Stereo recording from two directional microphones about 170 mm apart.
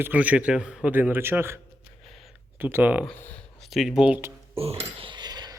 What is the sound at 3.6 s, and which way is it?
Speech, centre (ahead or behind).